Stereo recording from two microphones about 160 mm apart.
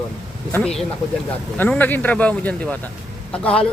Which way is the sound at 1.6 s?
10° left (ahead or behind).